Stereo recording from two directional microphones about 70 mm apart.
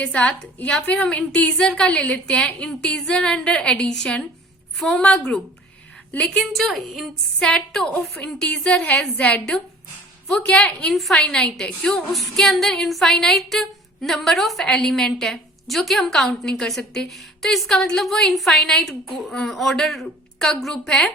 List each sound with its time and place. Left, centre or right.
0.0 s a woman's voice: left; by 7.0 s centre
7.3 s a woman's voice: centre
8.8 s a woman's voice: left
10.9 s a woman's voice: centre